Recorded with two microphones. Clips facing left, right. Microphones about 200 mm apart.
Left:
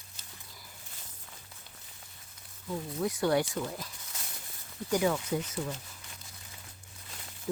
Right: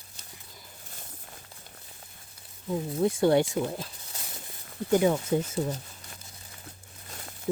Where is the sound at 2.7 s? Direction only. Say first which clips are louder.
Right 6 dB; 25° right (ahead or behind).